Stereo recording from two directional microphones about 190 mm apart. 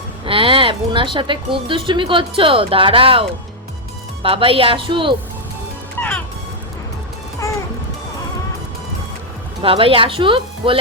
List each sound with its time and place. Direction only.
0.3 s speech: 30° right (ahead or behind)
6.0 s music: 10° left (ahead or behind)
9.6 s speech: 30° right (ahead or behind)